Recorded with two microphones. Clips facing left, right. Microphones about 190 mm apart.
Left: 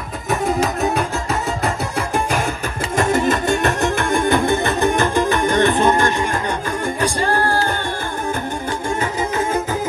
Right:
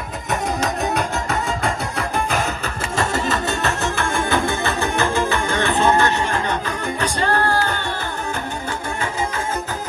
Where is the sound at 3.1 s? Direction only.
55° left (ahead or behind).